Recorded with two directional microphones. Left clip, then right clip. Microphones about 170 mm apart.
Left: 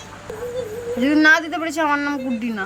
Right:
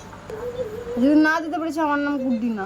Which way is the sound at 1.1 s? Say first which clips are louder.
Left 4 dB; 5° right (ahead or behind).